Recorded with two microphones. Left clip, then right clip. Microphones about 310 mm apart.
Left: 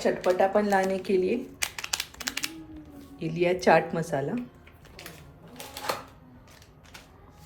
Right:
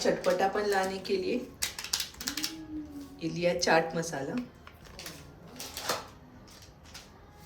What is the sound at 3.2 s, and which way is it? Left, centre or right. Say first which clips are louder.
Speech: left 3 dB; centre.